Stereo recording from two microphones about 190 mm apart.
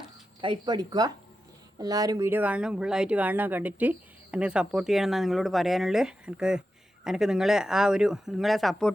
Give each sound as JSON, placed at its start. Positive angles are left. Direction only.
{"t": 0.4, "sound": "speech", "side_deg": -25}